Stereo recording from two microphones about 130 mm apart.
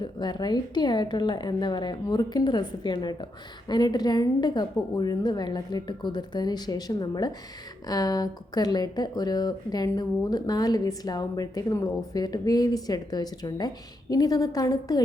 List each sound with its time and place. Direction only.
0.0 s a woman's voice: 35° left (ahead or behind)